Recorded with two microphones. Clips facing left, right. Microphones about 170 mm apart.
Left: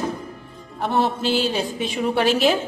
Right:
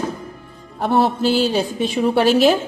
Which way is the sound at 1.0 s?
40° right (ahead or behind).